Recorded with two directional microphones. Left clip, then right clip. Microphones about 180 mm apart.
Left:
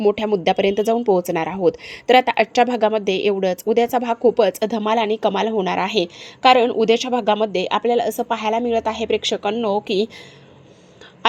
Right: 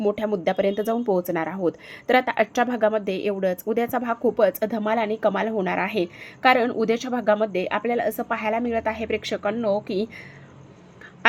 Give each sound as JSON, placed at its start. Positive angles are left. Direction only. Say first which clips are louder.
{"t": 0.0, "sound": "speech", "louder": "left 5 dB", "side_deg": 25}
{"t": 6.8, "sound": "speech", "louder": "left 7 dB", "side_deg": -15}
{"t": 7.3, "sound": "speech", "louder": "left 1 dB", "side_deg": 25}